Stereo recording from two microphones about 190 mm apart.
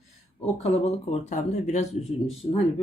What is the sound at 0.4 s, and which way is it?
Speech, 35° left (ahead or behind).